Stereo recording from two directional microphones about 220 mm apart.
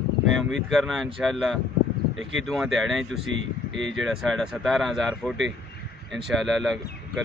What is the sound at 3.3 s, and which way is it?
Speech, 55° right (ahead or behind).